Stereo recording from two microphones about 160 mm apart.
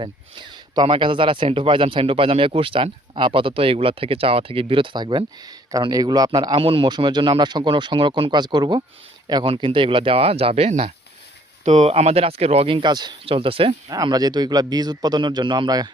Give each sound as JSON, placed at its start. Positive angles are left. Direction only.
{"t": 0.0, "sound": "speech", "side_deg": -30}
{"t": 13.8, "sound": "speech", "side_deg": -25}